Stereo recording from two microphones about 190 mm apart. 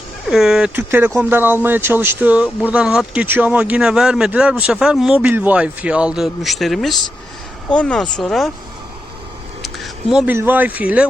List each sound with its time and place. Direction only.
0.3 s speech: centre (ahead or behind)
9.6 s speech: centre (ahead or behind)